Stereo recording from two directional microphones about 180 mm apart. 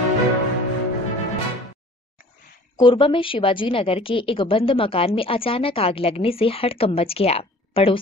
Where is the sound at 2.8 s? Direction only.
25° left (ahead or behind).